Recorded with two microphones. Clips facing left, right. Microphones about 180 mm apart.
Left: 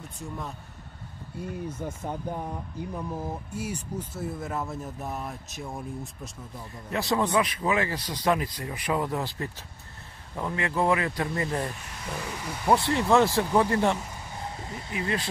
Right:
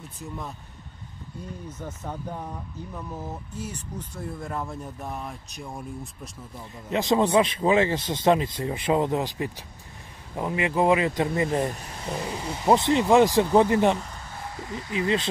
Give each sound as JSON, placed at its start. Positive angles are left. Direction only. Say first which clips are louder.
{"t": 1.4, "sound": "speech", "louder": "left 4 dB", "side_deg": 10}
{"t": 6.9, "sound": "speech", "louder": "right 4 dB", "side_deg": -20}
{"t": 14.6, "sound": "speech", "louder": "right 4 dB", "side_deg": 25}
{"t": 15.0, "sound": "speech", "louder": "right 5 dB", "side_deg": -20}